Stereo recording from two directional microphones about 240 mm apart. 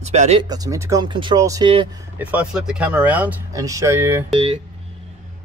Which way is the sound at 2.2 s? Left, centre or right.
Centre.